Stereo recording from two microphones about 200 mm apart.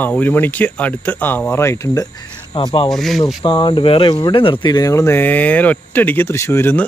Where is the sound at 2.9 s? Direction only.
Centre (ahead or behind).